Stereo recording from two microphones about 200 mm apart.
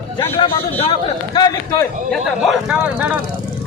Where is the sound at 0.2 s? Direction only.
25° left (ahead or behind).